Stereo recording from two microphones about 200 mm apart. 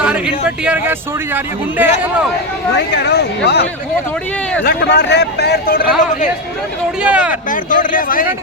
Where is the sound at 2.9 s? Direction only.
55° left (ahead or behind).